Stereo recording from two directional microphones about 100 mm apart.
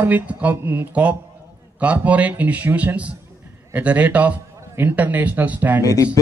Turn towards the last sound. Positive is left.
turn(degrees=35)  # may be behind; listen again after turning